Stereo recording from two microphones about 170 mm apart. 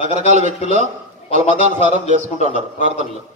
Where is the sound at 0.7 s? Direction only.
45° right (ahead or behind).